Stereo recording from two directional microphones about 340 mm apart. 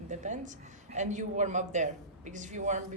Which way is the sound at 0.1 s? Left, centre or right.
Right.